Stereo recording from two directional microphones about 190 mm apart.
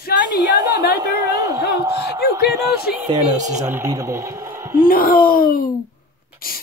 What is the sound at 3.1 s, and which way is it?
Speech, 20° right (ahead or behind).